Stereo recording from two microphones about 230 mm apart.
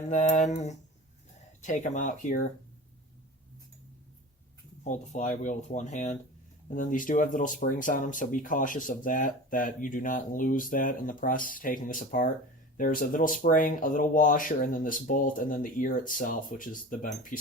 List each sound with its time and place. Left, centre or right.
0.1 s speech: left
4.8 s speech: left